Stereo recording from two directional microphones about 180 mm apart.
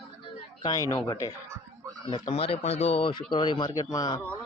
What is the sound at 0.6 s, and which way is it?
Speech, 20° left (ahead or behind).